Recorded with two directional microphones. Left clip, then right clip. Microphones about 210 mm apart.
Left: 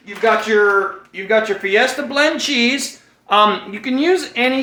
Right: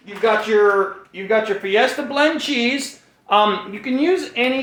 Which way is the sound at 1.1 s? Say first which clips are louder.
Left 2 dB; 15° left (ahead or behind).